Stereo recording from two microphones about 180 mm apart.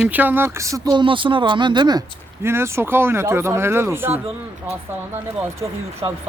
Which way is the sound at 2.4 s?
15° right (ahead or behind).